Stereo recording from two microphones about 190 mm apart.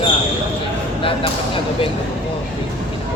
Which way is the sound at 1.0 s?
30° left (ahead or behind).